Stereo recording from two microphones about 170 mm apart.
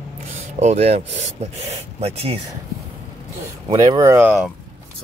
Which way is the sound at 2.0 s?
35° right (ahead or behind).